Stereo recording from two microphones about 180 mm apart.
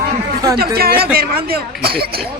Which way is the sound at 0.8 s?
60° right (ahead or behind).